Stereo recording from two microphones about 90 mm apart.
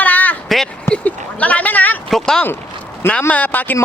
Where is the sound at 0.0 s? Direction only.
20° left (ahead or behind).